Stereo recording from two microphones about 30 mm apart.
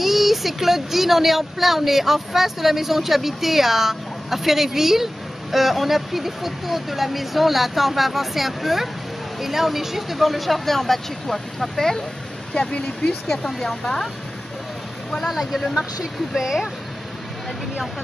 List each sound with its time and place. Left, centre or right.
0.0 s speech: centre
11.7 s speech: centre
12.5 s speech: left
13.3 s speech: centre
15.2 s speech: centre
15.7 s speech: centre